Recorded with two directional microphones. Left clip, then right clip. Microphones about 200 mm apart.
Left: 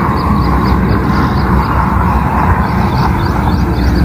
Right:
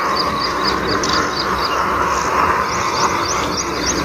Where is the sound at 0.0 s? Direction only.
40° left (ahead or behind).